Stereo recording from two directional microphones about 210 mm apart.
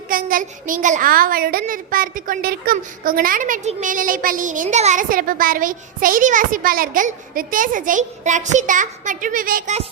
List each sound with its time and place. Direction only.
0.1 s a child's voice: 40° right (ahead or behind)